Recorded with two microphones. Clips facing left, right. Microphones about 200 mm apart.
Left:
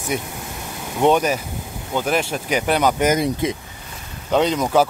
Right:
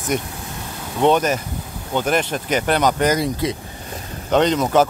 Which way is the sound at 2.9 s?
20° left (ahead or behind).